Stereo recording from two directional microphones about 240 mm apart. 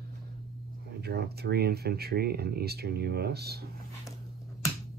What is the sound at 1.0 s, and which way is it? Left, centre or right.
Speech, right.